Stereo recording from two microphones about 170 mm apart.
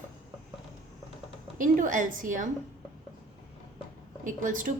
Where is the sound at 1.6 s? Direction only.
50° right (ahead or behind).